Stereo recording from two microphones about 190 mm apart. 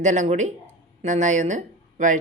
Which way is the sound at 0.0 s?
40° right (ahead or behind).